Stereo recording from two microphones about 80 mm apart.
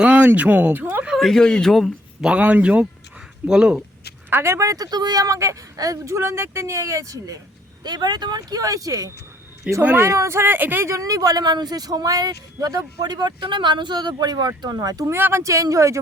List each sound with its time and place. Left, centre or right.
0.0 s a sound: centre
0.3 s speech: centre
1.1 s speech: centre
2.4 s speech: centre
4.3 s speech: right
7.9 s speech: right
9.7 s speech: centre
10.1 s speech: right
10.8 s speech: right
15.1 s speech: right